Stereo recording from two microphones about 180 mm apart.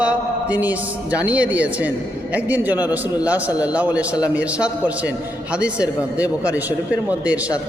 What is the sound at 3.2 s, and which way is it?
A woman's voice, 10° right (ahead or behind).